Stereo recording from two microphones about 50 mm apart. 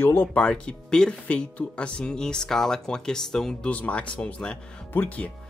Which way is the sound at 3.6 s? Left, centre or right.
Left.